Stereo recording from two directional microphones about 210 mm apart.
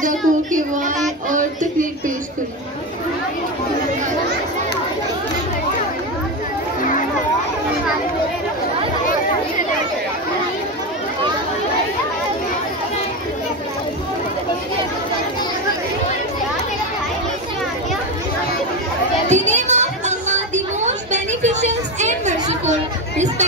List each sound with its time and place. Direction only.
0.0 s child singing: 40° right (ahead or behind)
1.3 s a sound: 40° right (ahead or behind)
6.8 s children playing: 40° left (ahead or behind)
19.2 s music: 35° right (ahead or behind)